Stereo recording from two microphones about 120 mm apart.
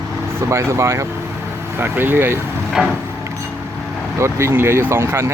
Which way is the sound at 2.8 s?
Centre (ahead or behind).